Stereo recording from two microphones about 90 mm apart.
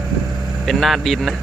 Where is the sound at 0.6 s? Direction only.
Centre (ahead or behind).